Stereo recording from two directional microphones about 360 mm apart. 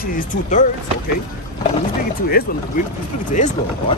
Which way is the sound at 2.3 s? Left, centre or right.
Left.